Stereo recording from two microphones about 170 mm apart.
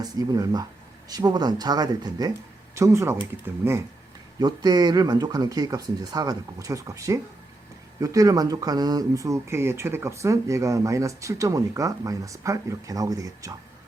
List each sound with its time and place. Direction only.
0.0 s speech: 20° right (ahead or behind)